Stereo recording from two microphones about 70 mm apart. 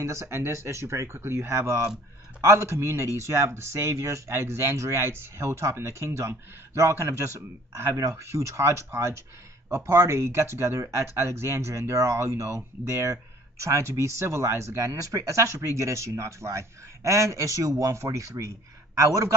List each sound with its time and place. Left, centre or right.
0.0 s speech: right